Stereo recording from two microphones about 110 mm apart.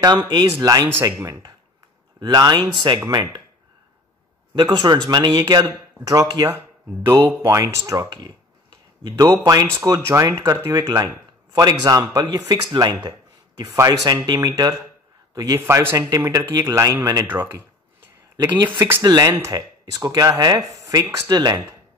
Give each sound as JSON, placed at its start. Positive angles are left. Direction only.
{"t": 0.0, "sound": "speech", "side_deg": -40}
{"t": 0.8, "sound": "a man's voice", "side_deg": -25}
{"t": 4.6, "sound": "speech", "side_deg": -40}
{"t": 9.5, "sound": "a man's voice", "side_deg": -30}
{"t": 15.6, "sound": "a man's voice", "side_deg": -20}
{"t": 17.3, "sound": "a sound", "side_deg": -20}
{"t": 18.8, "sound": "a man's voice", "side_deg": -20}
{"t": 19.5, "sound": "speech", "side_deg": -35}